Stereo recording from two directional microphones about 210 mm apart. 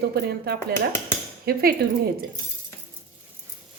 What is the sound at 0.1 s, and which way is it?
A woman's voice, 50° right (ahead or behind).